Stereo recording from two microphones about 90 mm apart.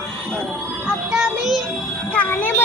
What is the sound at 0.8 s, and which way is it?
Music, 10° right (ahead or behind).